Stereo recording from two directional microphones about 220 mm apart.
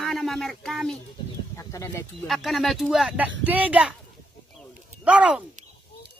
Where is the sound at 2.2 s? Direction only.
Centre (ahead or behind).